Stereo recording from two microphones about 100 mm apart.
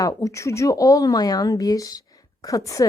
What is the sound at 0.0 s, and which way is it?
A woman's voice, 35° left (ahead or behind).